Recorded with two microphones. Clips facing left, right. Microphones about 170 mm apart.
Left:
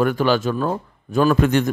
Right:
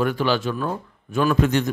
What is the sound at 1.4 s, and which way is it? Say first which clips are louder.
Speech: left 2 dB; 55° left (ahead or behind).